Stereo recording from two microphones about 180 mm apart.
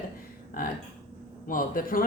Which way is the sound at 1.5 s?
50° left (ahead or behind).